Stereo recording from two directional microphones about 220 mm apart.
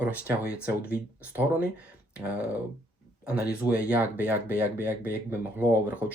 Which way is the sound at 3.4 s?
5° right (ahead or behind).